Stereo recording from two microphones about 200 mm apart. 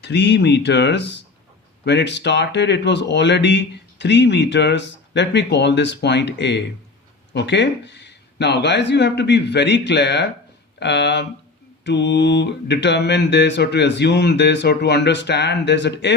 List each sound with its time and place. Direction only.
0.0 s speech: 60° left (ahead or behind)